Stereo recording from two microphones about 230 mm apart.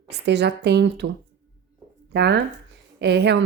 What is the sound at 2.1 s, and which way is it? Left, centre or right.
A woman's voice, right.